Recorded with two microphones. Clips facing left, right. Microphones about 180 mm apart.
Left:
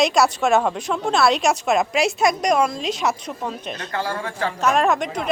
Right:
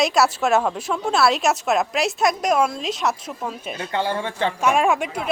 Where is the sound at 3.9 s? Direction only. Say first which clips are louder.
Right 3 dB; 25° right (ahead or behind).